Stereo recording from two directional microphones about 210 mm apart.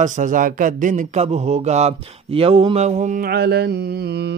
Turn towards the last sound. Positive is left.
turn(degrees=-50)  # may be behind; listen again after turning